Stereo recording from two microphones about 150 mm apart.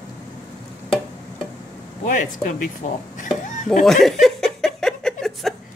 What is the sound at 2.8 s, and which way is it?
Stir, 55° left (ahead or behind).